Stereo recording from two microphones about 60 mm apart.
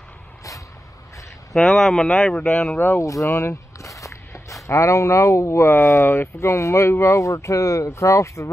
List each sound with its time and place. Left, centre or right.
1.5 s speech: centre
3.0 s walk: left
4.6 s speech: left